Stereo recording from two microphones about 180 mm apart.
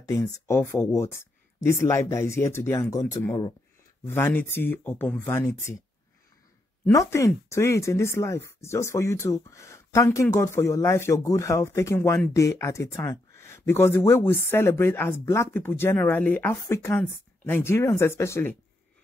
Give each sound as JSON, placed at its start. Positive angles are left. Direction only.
{"t": 0.0, "sound": "speech", "side_deg": 15}
{"t": 6.9, "sound": "speech", "side_deg": 15}